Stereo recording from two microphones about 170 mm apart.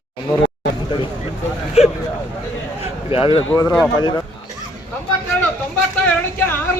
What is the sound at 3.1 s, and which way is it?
Speech, 35° left (ahead or behind).